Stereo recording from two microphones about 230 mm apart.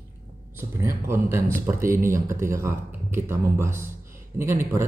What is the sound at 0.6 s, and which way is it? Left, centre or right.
A man's voice, centre.